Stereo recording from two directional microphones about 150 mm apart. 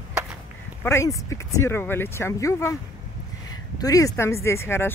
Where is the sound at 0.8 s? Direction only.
20° left (ahead or behind).